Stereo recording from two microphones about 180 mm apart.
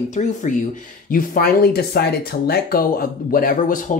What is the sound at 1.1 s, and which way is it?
Speech, 55° left (ahead or behind).